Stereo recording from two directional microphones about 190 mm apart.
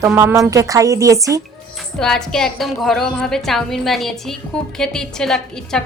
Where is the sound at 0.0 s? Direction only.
10° right (ahead or behind).